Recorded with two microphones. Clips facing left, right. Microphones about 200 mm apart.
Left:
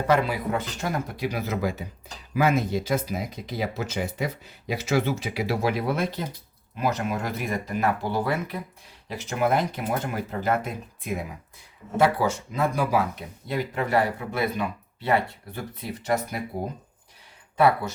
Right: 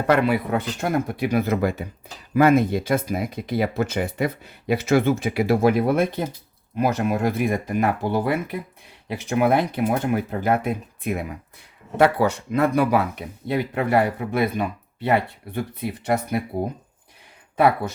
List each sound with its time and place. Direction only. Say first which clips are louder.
0.1 s speech: right 4 dB; 60° right (ahead or behind)